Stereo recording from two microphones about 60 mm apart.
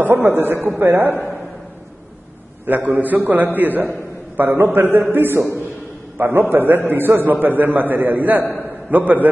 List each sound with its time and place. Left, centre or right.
0.0 s a man's voice: right
2.6 s a man's voice: right